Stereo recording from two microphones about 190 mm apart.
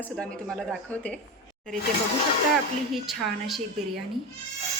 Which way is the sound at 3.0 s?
Centre (ahead or behind).